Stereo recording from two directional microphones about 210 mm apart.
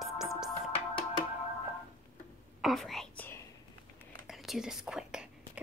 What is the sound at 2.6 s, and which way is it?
Whispering, centre (ahead or behind).